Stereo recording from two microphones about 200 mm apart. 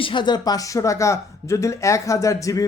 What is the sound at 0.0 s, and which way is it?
Speech, 25° left (ahead or behind).